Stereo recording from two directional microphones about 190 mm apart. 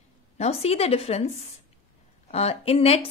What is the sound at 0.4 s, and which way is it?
A woman's voice, 35° left (ahead or behind).